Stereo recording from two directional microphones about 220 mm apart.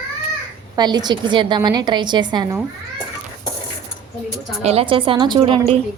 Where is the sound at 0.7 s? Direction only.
20° right (ahead or behind).